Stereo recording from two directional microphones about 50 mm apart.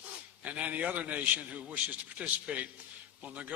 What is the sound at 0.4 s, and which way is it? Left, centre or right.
A man's voice, right.